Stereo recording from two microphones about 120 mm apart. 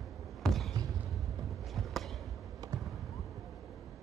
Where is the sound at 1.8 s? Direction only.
Centre (ahead or behind).